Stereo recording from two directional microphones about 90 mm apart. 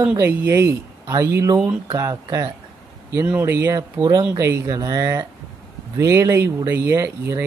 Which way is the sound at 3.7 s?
50° right (ahead or behind).